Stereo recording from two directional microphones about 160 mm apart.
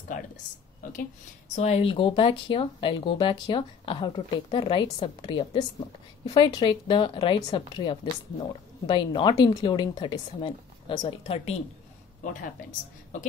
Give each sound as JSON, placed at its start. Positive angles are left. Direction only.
{"t": 1.5, "sound": "speech", "side_deg": 40}